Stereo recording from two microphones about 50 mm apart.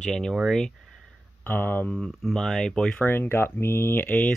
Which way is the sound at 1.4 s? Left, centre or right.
Left.